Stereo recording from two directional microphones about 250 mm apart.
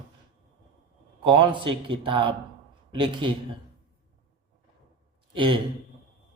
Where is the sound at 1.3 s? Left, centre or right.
Centre.